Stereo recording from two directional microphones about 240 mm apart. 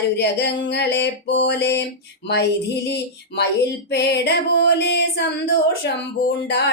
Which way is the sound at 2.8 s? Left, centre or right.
Left.